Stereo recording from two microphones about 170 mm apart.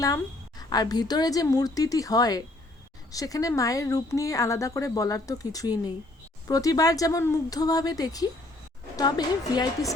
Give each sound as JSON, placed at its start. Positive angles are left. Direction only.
{"t": 0.7, "sound": "a woman's voice", "side_deg": 25}